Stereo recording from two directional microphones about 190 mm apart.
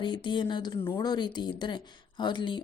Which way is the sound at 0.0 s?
25° left (ahead or behind).